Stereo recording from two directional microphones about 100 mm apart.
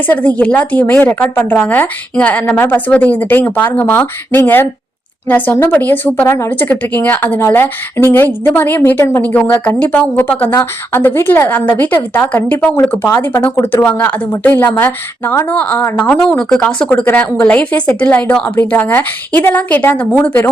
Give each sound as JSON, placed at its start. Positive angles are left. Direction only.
{"t": 0.3, "sound": "a woman's voice", "side_deg": 15}
{"t": 6.2, "sound": "a woman's voice", "side_deg": 25}